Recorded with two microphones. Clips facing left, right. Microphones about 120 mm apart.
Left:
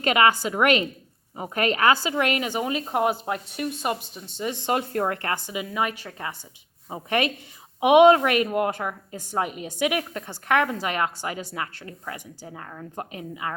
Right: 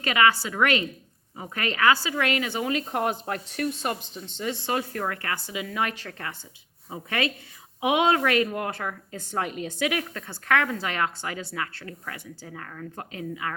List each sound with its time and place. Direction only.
0.0 s a woman's voice: 25° left (ahead or behind)
5.4 s a woman's voice: 20° left (ahead or behind)